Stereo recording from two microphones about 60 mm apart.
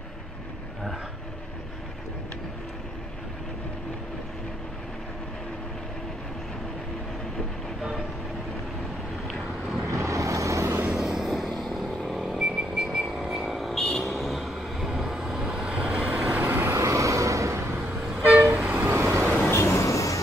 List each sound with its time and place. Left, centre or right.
9.8 s vehicle: right
10.9 s vehicle: centre
12.2 s a sound: centre
14.2 s vehicle: centre; by 16.4 s right
16.4 s vehicle: right
16.7 s vehicle: right
18.1 s vehicle: right
18.8 s vehicle: right
19.5 s music: left